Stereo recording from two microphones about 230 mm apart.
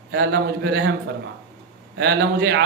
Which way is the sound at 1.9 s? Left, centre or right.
Right.